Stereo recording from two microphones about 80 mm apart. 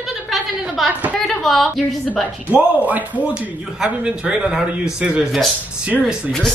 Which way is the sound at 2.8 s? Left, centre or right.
Centre.